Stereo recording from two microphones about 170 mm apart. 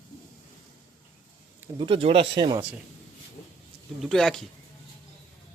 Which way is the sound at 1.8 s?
30° right (ahead or behind).